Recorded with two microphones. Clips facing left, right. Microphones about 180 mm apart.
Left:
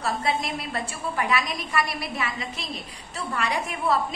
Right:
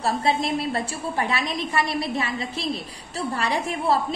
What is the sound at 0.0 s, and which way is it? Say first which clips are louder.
A woman's voice: right 4 dB; 30° right (ahead or behind).